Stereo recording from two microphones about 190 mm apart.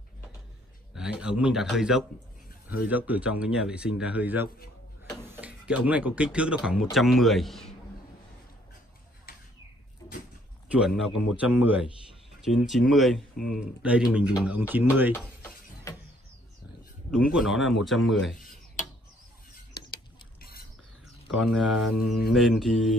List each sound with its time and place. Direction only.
0.9 s speech: 5° right (ahead or behind)
10.9 s speech: 5° right (ahead or behind)
17.1 s speech: 5° right (ahead or behind)
20.3 s a sound: 50° left (ahead or behind)
21.4 s speech: centre (ahead or behind)